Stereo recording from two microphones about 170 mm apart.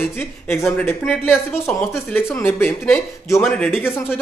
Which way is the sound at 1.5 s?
10° left (ahead or behind).